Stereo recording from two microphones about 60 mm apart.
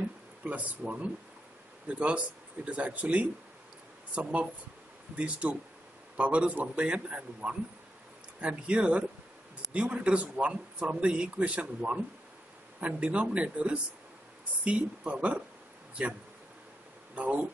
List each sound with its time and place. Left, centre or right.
0.4 s a man's voice: right
17.1 s a man's voice: right